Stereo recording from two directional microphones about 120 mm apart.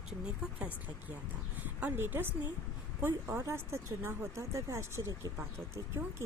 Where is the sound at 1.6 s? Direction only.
15° right (ahead or behind).